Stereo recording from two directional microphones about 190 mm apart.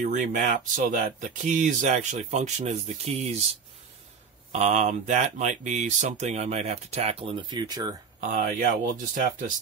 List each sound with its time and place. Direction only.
0.0 s speech: 40° right (ahead or behind)
4.5 s speech: 35° right (ahead or behind); by 7.9 s 20° right (ahead or behind)
8.2 s speech: 45° right (ahead or behind)